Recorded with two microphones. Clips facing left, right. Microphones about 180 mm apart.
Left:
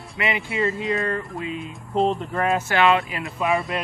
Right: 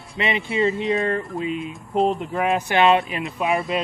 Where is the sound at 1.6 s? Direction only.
Centre (ahead or behind).